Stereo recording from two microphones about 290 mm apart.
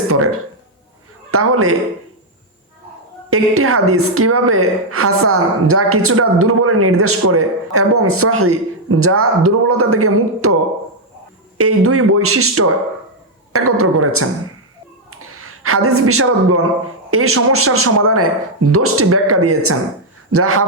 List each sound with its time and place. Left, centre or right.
1.3 s a woman's voice: right
3.2 s a woman's voice: right